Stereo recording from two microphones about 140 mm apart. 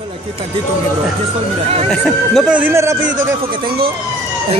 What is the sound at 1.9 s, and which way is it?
Speech, centre (ahead or behind).